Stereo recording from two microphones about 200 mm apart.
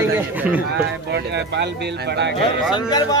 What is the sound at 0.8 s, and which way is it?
Speech, 60° right (ahead or behind).